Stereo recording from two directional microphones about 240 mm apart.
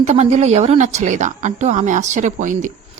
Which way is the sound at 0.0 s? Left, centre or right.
Right.